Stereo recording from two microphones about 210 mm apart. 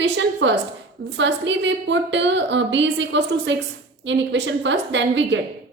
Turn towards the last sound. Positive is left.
turn(degrees=-60)  # may be behind; listen again after turning